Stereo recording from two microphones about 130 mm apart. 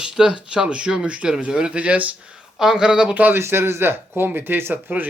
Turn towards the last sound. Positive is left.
turn(degrees=-15)  # may be behind; listen again after turning